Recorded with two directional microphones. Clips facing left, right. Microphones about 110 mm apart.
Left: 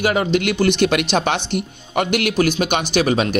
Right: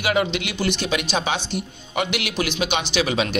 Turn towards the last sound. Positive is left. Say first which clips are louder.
# left 5 dB
turn(degrees=45)  # may be behind; listen again after turning